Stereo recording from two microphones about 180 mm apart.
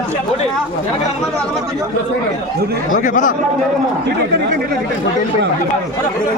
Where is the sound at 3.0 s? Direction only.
45° left (ahead or behind).